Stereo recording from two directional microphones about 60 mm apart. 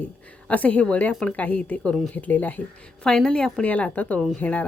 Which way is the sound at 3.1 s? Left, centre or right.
Centre.